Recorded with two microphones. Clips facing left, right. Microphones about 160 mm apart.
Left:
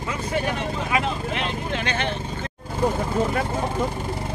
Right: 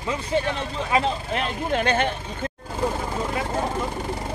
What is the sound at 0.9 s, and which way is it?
Speech, 30° right (ahead or behind).